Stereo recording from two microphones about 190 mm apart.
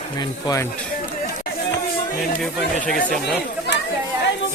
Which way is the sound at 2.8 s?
Centre (ahead or behind).